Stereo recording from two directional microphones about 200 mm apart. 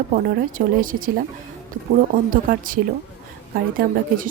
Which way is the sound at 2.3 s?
45° right (ahead or behind).